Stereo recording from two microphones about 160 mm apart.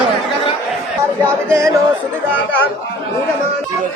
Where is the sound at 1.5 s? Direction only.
20° right (ahead or behind).